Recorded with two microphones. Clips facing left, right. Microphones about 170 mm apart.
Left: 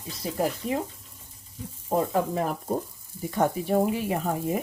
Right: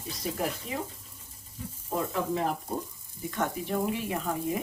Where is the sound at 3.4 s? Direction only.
40° left (ahead or behind).